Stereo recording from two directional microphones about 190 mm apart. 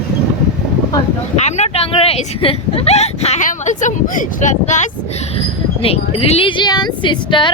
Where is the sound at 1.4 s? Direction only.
35° left (ahead or behind).